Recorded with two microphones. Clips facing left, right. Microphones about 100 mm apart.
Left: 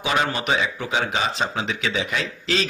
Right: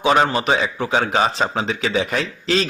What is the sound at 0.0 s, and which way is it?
Speech, 35° right (ahead or behind).